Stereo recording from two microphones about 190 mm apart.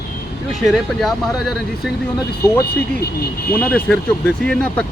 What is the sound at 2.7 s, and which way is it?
Speech, 55° left (ahead or behind).